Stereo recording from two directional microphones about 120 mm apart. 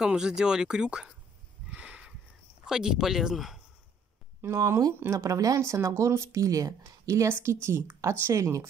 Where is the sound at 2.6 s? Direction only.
5° right (ahead or behind).